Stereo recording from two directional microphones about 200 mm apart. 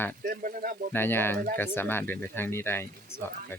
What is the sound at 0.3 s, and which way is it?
Speech, 45° right (ahead or behind).